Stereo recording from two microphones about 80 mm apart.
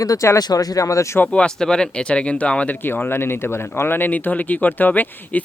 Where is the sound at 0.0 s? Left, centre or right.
Left.